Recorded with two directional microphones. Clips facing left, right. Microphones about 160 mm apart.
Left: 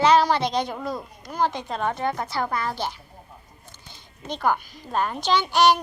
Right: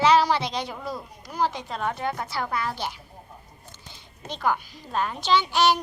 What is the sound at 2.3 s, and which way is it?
Speech, 35° left (ahead or behind).